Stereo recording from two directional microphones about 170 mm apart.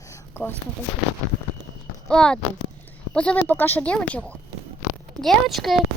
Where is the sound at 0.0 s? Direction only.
15° left (ahead or behind).